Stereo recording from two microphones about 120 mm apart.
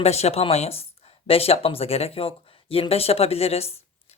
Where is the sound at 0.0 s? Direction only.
60° left (ahead or behind).